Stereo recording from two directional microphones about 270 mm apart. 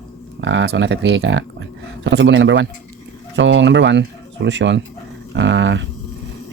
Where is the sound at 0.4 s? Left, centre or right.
Right.